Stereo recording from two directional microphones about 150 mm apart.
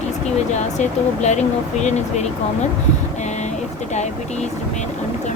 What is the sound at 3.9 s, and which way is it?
Speech, 50° left (ahead or behind).